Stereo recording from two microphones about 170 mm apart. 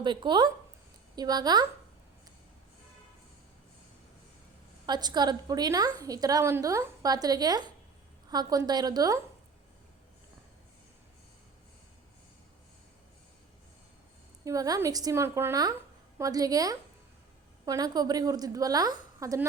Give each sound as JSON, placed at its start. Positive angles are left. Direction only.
{"t": 0.0, "sound": "a woman's voice", "side_deg": -25}
{"t": 4.9, "sound": "a woman's voice", "side_deg": -25}
{"t": 14.4, "sound": "a woman's voice", "side_deg": -20}